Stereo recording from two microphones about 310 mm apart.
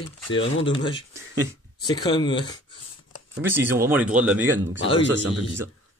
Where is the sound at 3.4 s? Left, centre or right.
Centre.